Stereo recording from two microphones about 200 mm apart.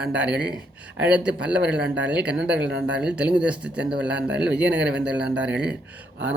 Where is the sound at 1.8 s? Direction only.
60° right (ahead or behind).